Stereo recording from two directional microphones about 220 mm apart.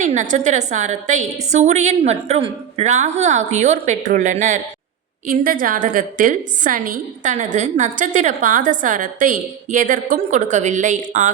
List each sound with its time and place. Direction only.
0.0 s a woman's voice: 35° right (ahead or behind)